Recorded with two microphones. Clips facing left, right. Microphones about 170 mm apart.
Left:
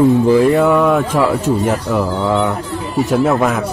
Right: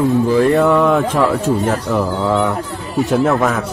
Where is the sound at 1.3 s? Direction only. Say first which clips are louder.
Left 1 dB; 10° left (ahead or behind).